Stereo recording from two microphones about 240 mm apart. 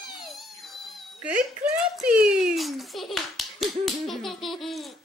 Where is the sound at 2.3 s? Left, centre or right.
Centre.